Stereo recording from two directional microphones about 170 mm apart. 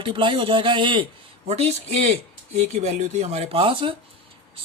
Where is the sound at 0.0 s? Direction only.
30° right (ahead or behind).